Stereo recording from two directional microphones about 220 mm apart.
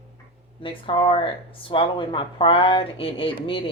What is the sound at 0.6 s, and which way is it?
Speech, 25° left (ahead or behind).